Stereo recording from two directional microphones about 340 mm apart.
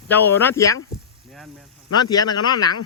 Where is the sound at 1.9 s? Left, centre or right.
Centre.